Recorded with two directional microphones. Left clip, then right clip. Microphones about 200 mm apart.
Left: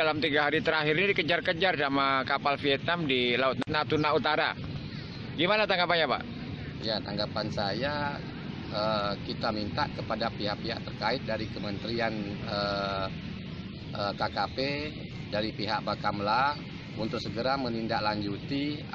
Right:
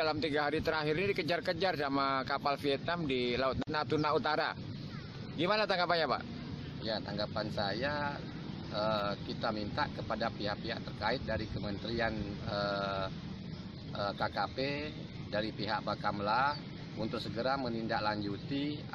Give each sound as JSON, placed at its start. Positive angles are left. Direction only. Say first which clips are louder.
{"t": 0.0, "sound": "a man's voice", "louder": "left 6 dB", "side_deg": -5}